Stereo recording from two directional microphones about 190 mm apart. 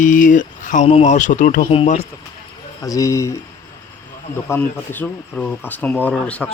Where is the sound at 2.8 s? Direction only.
15° left (ahead or behind).